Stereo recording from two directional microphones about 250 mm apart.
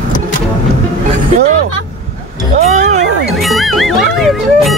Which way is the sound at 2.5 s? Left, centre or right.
Right.